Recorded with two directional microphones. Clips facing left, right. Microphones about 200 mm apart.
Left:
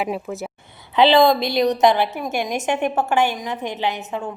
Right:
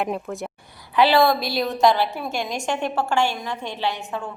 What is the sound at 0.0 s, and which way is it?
Speech, 5° left (ahead or behind).